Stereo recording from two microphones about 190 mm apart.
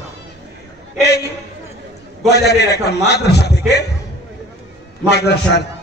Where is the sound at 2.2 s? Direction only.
60° left (ahead or behind).